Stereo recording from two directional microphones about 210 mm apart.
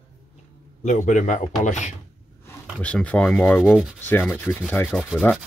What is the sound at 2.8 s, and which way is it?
Rub, 5° left (ahead or behind).